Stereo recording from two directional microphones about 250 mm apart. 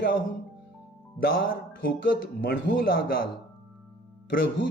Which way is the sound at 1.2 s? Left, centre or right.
Left.